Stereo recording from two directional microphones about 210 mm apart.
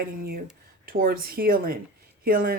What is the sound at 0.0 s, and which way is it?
A woman's voice, 45° right (ahead or behind).